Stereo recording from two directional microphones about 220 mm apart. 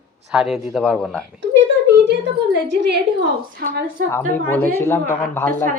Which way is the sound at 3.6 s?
50° right (ahead or behind).